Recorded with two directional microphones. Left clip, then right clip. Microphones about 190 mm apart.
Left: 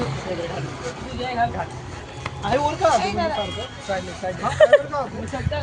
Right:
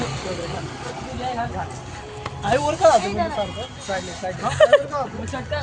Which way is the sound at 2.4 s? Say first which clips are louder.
Right 3 dB; 40° right (ahead or behind).